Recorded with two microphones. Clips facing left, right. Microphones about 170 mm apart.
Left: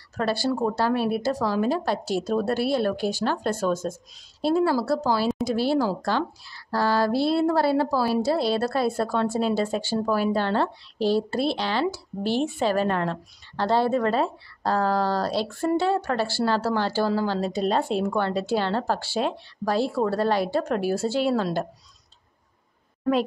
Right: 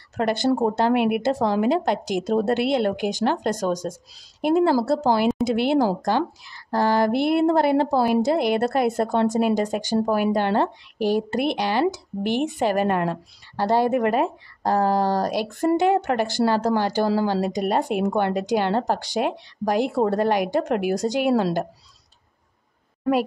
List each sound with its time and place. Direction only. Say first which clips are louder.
0.2 s a woman's voice: right 3 dB; 20° right (ahead or behind)
0.5 s speech: right 5 dB; 30° right (ahead or behind)
0.8 s a woman's voice: right 4 dB; 20° right (ahead or behind)